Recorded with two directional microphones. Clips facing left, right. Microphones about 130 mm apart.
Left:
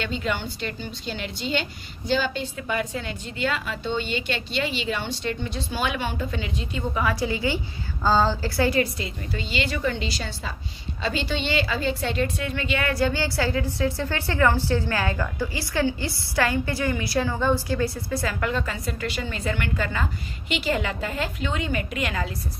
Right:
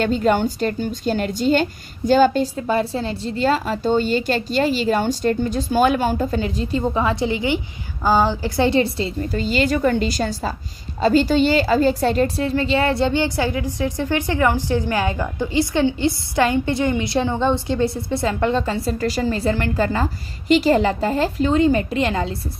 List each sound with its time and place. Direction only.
0.0 s a woman's voice: 45° right (ahead or behind)